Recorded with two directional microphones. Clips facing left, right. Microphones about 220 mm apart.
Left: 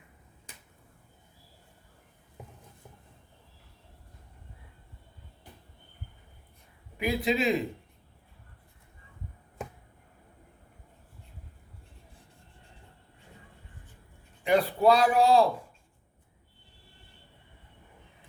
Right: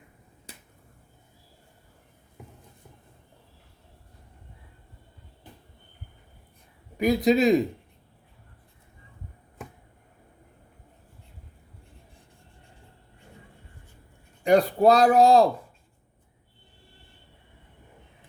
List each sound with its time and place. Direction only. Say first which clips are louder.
0.5 s finger snapping: right 6 dB; 35° right (ahead or behind)
6.9 s a man's voice: right 7 dB; 40° right (ahead or behind)
14.4 s speech: right 4 dB; 45° right (ahead or behind)